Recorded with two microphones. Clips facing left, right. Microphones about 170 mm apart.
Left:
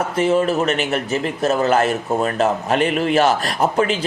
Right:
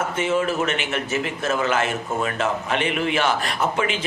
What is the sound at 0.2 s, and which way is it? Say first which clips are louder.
A man's voice: left 6 dB; 35° left (ahead or behind).